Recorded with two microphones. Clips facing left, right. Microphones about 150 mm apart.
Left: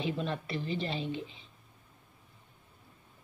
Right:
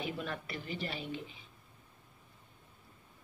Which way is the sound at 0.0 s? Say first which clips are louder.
Left 5 dB; 25° left (ahead or behind).